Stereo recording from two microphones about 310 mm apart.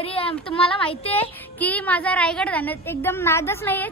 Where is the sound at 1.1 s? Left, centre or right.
Centre.